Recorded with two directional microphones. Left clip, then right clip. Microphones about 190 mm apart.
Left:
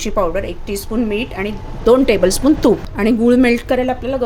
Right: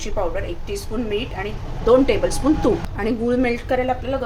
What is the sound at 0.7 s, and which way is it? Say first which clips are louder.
A woman's voice: left 4 dB; 60° left (ahead or behind).